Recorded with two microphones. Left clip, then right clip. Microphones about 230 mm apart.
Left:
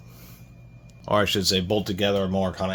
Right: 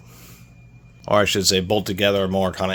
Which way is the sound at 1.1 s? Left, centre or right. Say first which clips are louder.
Right 4 dB; right.